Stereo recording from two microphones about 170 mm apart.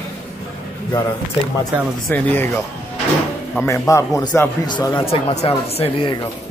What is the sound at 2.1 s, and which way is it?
A man's voice, 10° left (ahead or behind).